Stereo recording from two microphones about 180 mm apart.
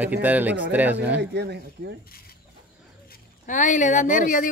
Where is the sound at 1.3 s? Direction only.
70° right (ahead or behind).